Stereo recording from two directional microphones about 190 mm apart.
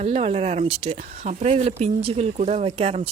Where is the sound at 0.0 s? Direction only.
35° right (ahead or behind).